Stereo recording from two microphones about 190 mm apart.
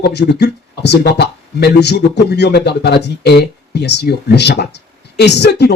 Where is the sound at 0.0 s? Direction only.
60° left (ahead or behind).